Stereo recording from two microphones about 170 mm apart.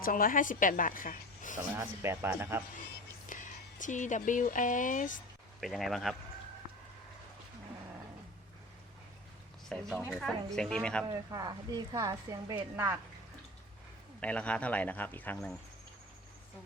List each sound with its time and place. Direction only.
0.0 s a woman's voice: 55° left (ahead or behind)
2.0 s speech: 15° right (ahead or behind)
3.2 s speech: 50° left (ahead or behind)
5.5 s a man's voice: centre (ahead or behind)
9.6 s a man's voice: centre (ahead or behind)
11.0 s a woman's voice: 20° right (ahead or behind)
14.2 s speech: 5° left (ahead or behind)